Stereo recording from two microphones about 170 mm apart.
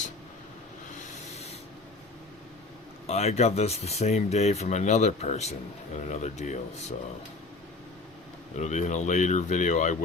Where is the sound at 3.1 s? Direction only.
40° left (ahead or behind).